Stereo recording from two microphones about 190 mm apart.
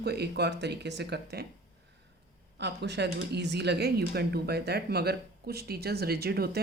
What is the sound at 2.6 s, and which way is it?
Speech, 65° right (ahead or behind).